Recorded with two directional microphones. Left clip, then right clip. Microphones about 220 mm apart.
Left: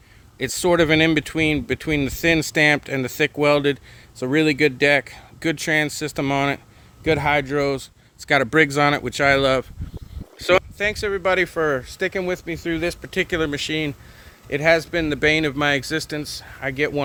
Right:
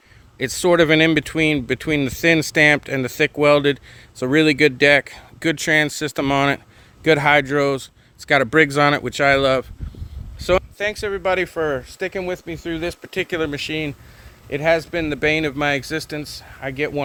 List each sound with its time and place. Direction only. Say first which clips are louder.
0.3 s speech: right 2 dB; 15° right (ahead or behind)